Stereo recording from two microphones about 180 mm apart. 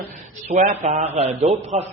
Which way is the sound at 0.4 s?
40° right (ahead or behind).